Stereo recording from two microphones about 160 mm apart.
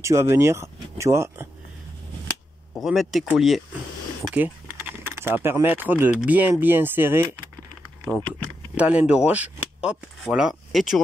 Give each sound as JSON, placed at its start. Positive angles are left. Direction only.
{"t": 0.0, "sound": "speech", "side_deg": -15}
{"t": 2.7, "sound": "speech", "side_deg": 0}
{"t": 4.4, "sound": "speech", "side_deg": -10}
{"t": 8.0, "sound": "speech", "side_deg": 5}
{"t": 8.7, "sound": "speech", "side_deg": -10}